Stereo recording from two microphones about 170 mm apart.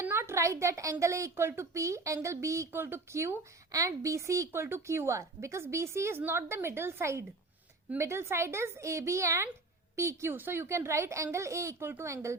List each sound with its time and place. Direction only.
0.0 s a woman's voice: 15° right (ahead or behind)